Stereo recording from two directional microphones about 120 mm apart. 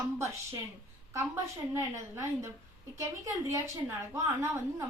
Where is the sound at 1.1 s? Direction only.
20° right (ahead or behind).